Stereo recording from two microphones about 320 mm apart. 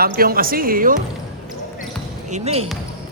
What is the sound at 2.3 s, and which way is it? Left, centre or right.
Speech, centre.